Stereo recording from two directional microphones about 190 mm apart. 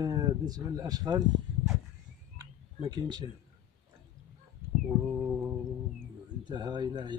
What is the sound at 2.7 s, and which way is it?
Speech, 25° right (ahead or behind).